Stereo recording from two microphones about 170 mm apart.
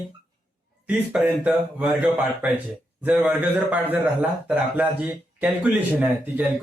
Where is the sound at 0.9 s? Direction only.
5° right (ahead or behind).